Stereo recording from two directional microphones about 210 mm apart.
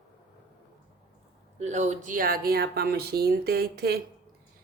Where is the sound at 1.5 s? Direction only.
35° right (ahead or behind); by 4.0 s 50° right (ahead or behind).